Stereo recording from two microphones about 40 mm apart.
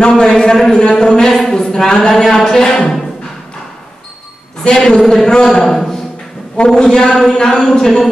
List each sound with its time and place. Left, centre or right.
0.0 s speech: left
1.3 s a sound: centre
2.6 s music: centre
4.6 s speech: centre
4.9 s a man's voice: centre
5.3 s speech: centre